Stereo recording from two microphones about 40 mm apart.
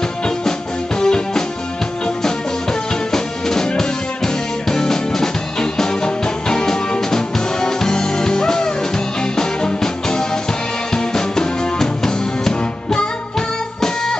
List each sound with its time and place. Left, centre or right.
0.5 s music: centre
3.1 s music: centre